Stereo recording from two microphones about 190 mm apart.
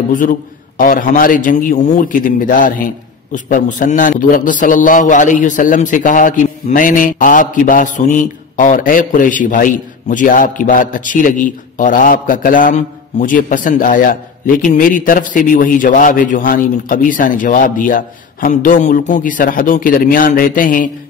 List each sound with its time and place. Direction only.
0.1 s a man's voice: 45° left (ahead or behind)